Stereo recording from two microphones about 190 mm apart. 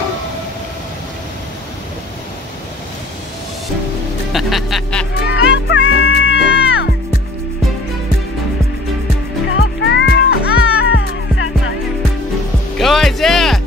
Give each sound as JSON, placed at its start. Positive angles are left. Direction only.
{"t": 4.3, "sound": "speech", "side_deg": 0}
{"t": 5.2, "sound": "music", "side_deg": 65}
{"t": 9.6, "sound": "music", "side_deg": 65}
{"t": 12.7, "sound": "music", "side_deg": 0}